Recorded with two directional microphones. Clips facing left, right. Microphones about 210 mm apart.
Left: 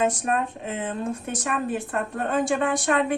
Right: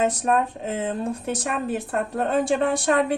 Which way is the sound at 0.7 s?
40° right (ahead or behind).